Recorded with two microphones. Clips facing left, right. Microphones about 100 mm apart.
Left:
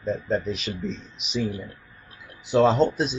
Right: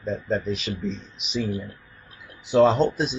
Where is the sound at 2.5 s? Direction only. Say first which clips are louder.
Right 1 dB; centre (ahead or behind).